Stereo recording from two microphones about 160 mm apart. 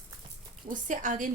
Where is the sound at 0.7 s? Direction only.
50° right (ahead or behind).